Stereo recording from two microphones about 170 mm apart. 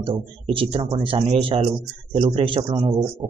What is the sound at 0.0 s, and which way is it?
Speech, 30° right (ahead or behind).